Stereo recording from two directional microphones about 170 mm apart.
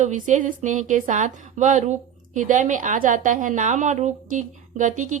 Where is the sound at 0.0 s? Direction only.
45° right (ahead or behind).